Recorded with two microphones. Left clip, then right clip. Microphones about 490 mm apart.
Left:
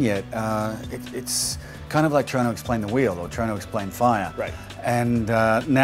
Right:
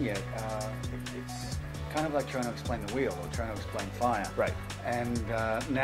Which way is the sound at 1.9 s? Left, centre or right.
Left.